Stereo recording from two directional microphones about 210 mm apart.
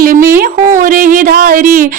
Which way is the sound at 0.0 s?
40° right (ahead or behind).